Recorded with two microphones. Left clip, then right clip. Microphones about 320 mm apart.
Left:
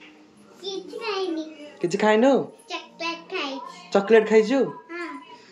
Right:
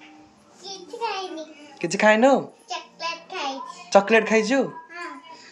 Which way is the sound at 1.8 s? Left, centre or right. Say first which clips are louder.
Right 2 dB; centre.